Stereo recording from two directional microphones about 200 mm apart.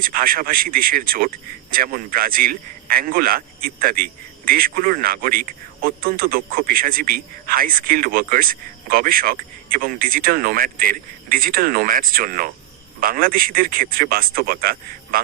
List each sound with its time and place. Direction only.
0.0 s a man's voice: 45° right (ahead or behind)